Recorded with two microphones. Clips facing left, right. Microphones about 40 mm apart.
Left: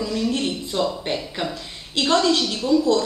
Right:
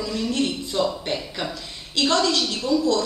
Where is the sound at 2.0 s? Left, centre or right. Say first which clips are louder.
Left 2 dB; centre.